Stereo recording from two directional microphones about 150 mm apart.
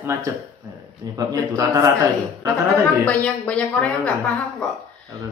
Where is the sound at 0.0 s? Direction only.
20° right (ahead or behind).